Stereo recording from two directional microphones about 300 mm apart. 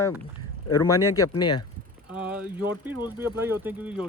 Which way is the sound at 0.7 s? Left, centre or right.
Centre.